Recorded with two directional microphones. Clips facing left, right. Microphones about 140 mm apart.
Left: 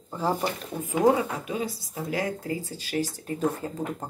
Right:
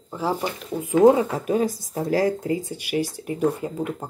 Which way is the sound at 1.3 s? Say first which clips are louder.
Right 8 dB; 45° right (ahead or behind).